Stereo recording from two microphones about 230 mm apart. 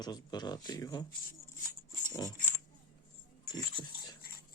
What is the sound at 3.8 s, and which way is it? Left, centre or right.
Dog, centre.